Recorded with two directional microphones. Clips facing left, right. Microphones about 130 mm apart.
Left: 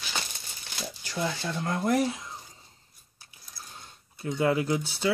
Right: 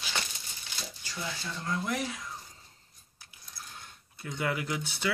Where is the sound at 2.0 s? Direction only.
25° left (ahead or behind).